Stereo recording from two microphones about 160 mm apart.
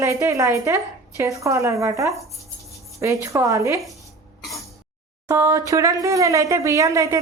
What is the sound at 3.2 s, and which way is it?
Speech, 20° right (ahead or behind).